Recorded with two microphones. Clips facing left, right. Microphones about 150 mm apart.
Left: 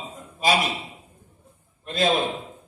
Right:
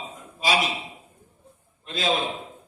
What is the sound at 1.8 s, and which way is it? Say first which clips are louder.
Speech: left 3 dB; 50° left (ahead or behind).